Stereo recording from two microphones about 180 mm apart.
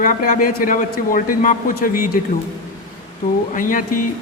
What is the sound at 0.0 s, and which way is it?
A woman's voice, 50° left (ahead or behind).